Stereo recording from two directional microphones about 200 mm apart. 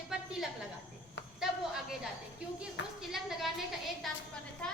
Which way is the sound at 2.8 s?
60° left (ahead or behind).